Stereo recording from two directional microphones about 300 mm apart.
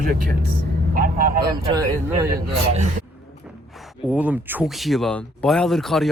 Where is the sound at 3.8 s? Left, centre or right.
Centre.